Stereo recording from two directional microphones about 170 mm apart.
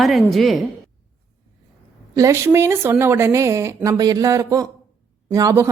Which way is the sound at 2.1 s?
20° right (ahead or behind).